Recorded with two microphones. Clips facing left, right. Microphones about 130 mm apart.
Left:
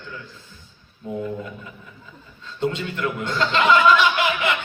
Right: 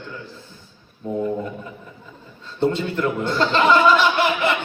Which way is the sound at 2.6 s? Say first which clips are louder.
Right 4 dB; 30° right (ahead or behind).